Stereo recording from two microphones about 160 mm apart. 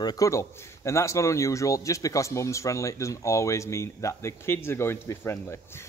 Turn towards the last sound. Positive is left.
turn(degrees=15)  # may be behind; listen again after turning